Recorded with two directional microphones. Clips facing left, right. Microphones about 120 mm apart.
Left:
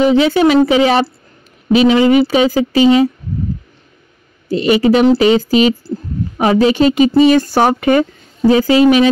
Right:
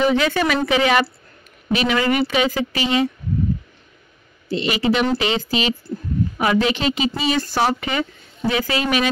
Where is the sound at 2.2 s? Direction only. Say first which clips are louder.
Left 7 dB; 35° left (ahead or behind).